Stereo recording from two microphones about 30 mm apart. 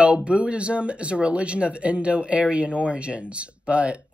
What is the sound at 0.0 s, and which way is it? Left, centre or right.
Speech, right.